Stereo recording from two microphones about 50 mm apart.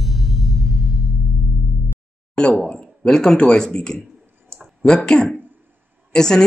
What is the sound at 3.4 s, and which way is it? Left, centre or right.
Speech, left.